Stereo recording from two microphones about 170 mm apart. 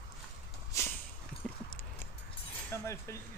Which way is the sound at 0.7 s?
20° left (ahead or behind).